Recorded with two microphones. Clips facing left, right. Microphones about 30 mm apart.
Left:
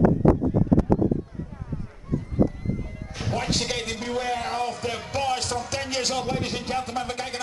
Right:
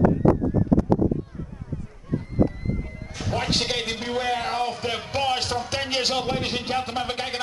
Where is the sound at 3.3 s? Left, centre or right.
Right.